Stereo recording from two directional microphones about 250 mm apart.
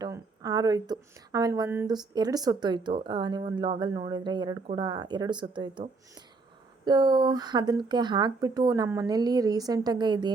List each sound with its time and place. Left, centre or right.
0.0 s speech: centre